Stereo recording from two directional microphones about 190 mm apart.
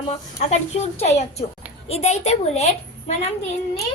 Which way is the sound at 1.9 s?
35° left (ahead or behind).